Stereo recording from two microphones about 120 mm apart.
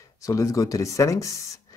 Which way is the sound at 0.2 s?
30° left (ahead or behind).